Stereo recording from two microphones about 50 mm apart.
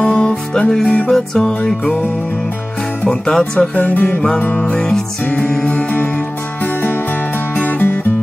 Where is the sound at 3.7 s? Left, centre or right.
Left.